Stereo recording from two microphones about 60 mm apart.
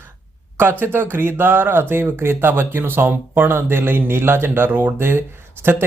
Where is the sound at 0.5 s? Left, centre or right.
Right.